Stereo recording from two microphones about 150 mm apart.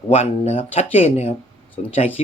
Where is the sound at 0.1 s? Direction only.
50° left (ahead or behind).